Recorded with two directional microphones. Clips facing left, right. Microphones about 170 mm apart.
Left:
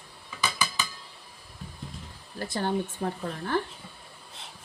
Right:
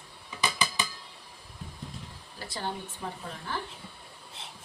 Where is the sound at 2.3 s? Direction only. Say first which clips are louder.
Left 8 dB; 50° left (ahead or behind).